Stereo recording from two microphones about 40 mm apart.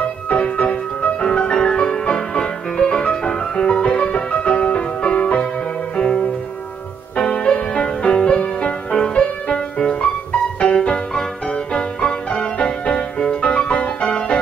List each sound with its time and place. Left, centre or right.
0.4 s music: left